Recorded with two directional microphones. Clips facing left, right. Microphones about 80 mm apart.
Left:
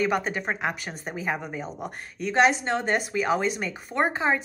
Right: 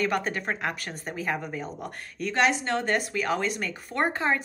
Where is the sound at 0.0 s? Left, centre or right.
Centre.